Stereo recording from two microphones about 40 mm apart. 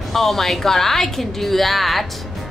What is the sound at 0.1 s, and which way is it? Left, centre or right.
A woman's voice, centre.